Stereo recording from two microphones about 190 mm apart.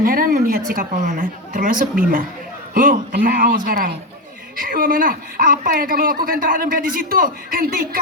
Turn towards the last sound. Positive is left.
turn(degrees=-50)  # may be behind; listen again after turning